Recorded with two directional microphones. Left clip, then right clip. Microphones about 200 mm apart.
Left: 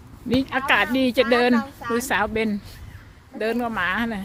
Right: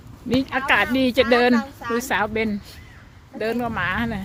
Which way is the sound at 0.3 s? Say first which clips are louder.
Right 1 dB; centre (ahead or behind).